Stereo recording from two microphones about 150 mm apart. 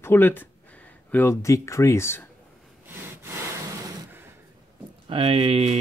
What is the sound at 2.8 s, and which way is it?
Sawing, 15° right (ahead or behind).